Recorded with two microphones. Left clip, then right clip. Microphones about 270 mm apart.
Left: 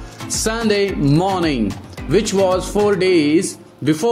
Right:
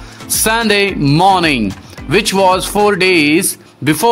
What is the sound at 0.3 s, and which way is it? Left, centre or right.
A man's voice, right.